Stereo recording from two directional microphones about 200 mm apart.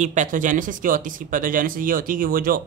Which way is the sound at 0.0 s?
40° right (ahead or behind).